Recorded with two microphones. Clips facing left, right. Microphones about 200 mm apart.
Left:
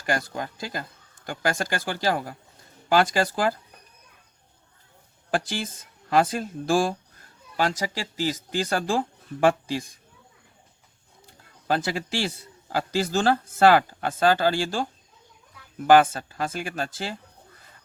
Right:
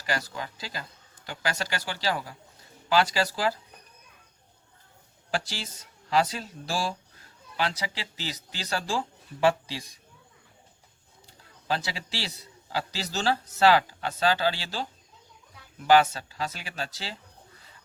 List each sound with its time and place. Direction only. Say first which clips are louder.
0.0 s speech: left 4 dB; 55° left (ahead or behind)
5.3 s speech: left 5 dB; 50° left (ahead or behind)
11.3 s a man's voice: left 4 dB; 50° left (ahead or behind)